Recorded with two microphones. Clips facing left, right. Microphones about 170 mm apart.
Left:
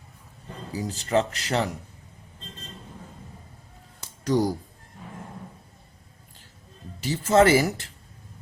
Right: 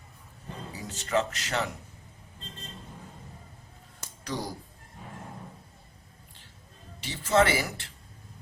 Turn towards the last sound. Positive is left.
turn(degrees=40)  # may be behind; listen again after turning